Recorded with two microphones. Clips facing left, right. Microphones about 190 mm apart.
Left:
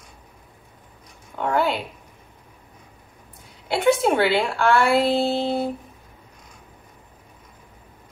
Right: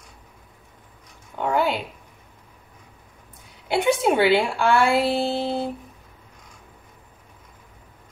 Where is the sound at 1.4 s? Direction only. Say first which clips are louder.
Even; 15° right (ahead or behind).